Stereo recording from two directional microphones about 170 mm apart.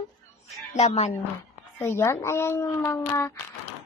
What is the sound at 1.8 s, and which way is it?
Speech, 15° left (ahead or behind).